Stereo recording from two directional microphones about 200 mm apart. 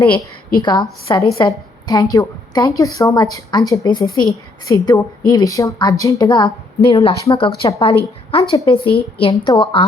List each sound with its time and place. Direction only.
0.1 s a woman's voice: 20° left (ahead or behind)